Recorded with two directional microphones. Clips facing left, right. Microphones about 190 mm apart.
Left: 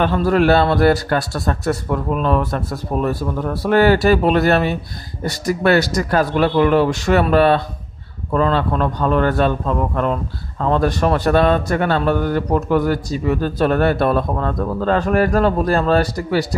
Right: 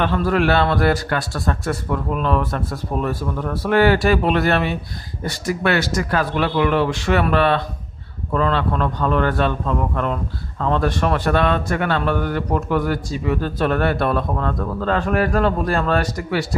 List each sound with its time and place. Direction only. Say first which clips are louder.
0.0 s a man's voice: left 3 dB; 40° left (ahead or behind)
10.6 s a man's voice: left 3 dB; 40° left (ahead or behind)